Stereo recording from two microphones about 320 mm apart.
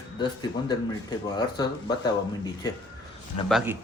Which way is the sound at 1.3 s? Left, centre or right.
Centre.